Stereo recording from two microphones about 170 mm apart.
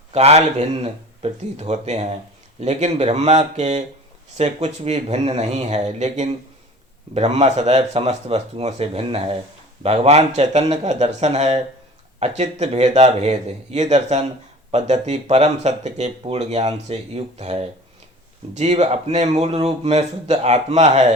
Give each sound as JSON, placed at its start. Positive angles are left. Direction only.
{"t": 0.1, "sound": "speech", "side_deg": -40}